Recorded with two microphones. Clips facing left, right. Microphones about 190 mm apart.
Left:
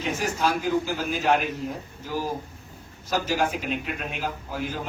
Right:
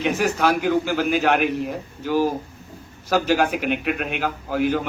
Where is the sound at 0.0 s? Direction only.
65° right (ahead or behind).